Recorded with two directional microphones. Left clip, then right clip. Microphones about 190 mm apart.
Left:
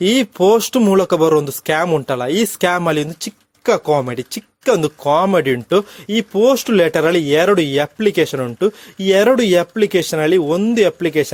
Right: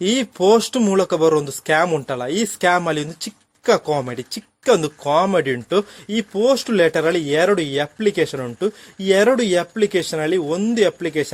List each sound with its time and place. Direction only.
0.0 s speech: 25° left (ahead or behind)